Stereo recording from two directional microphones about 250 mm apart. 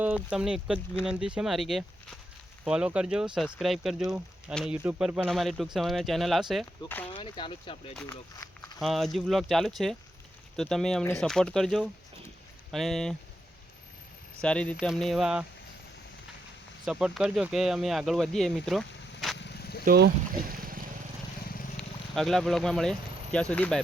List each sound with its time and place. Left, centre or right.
0.0 s speech: centre
7.2 s speech: centre
14.4 s speech: centre
16.8 s speech: centre
19.4 s vehicle: left
19.8 s boat: right
21.8 s speech: centre